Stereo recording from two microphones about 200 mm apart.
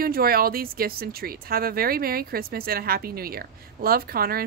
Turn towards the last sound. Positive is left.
turn(degrees=-50)  # may be behind; listen again after turning